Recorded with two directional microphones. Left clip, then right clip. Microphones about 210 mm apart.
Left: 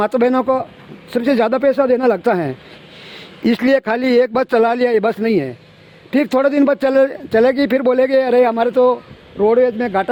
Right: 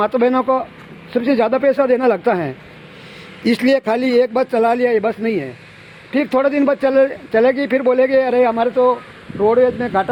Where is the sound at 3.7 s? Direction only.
45° left (ahead or behind).